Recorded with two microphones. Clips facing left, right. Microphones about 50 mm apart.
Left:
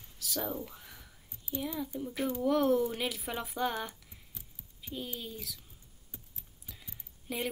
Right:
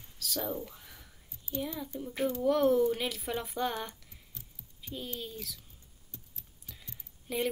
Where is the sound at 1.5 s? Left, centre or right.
Centre.